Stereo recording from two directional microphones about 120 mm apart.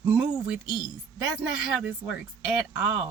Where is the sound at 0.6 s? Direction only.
35° left (ahead or behind).